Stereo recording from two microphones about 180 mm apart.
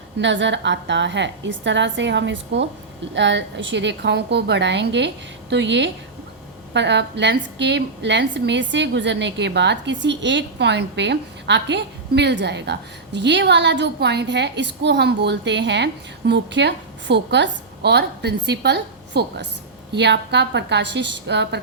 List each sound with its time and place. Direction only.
0.2 s a woman's voice: 80° right